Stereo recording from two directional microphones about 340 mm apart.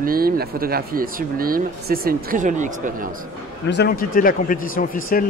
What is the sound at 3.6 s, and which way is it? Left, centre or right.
Speech, left.